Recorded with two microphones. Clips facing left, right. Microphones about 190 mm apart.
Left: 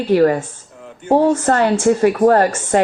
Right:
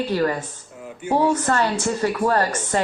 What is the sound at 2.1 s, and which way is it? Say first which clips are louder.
Speech: left 8 dB; 45° left (ahead or behind).